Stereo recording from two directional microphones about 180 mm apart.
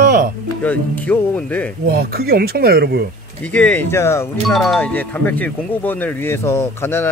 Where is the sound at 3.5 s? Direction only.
10° left (ahead or behind).